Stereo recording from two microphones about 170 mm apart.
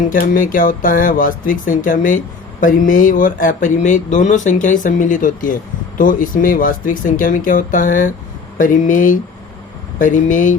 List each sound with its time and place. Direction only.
0.1 s speech: 55° left (ahead or behind)